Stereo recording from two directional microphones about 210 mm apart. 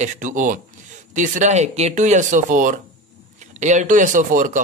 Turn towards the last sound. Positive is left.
turn(degrees=-40)  # may be behind; listen again after turning